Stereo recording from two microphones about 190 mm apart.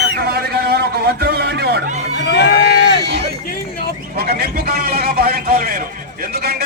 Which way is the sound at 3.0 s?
60° right (ahead or behind).